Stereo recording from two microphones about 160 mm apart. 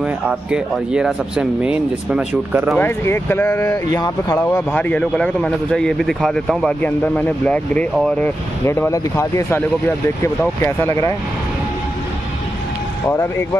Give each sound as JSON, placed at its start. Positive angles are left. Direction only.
{"t": 0.0, "sound": "speech", "side_deg": -5}
{"t": 2.8, "sound": "speech", "side_deg": 15}
{"t": 13.1, "sound": "speech", "side_deg": 20}